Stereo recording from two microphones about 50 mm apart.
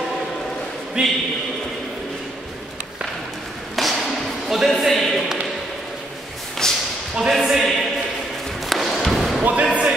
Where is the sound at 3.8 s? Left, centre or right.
Centre.